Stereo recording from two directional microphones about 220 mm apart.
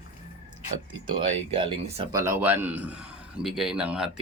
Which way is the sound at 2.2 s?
10° right (ahead or behind).